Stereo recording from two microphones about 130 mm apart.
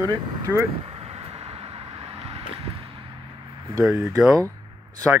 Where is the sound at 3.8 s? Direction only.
5° right (ahead or behind).